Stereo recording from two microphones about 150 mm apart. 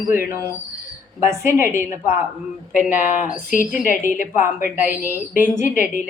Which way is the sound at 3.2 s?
60° left (ahead or behind).